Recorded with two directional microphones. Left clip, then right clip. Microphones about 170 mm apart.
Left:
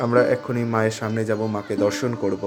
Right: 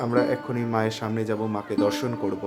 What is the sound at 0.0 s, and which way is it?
Speech, 20° left (ahead or behind).